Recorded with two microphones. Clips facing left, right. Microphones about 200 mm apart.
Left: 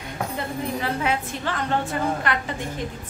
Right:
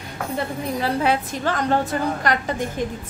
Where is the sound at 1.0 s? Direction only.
40° right (ahead or behind).